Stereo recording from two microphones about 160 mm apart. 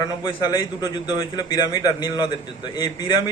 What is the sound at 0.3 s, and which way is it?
A man's voice, 25° left (ahead or behind).